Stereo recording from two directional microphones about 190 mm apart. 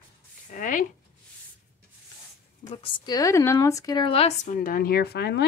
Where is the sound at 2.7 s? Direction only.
25° left (ahead or behind).